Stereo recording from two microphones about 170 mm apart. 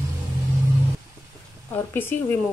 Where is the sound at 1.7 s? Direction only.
10° left (ahead or behind).